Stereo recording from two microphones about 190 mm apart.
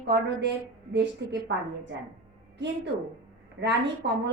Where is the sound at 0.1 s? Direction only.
65° right (ahead or behind).